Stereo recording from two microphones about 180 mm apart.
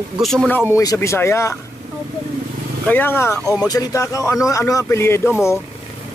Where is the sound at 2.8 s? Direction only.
10° left (ahead or behind).